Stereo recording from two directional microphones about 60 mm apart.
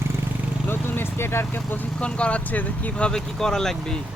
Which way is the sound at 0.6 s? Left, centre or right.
Left.